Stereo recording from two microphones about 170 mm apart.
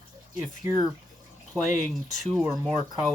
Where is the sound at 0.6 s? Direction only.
15° right (ahead or behind).